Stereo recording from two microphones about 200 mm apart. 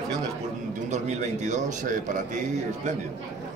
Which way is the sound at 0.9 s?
35° right (ahead or behind).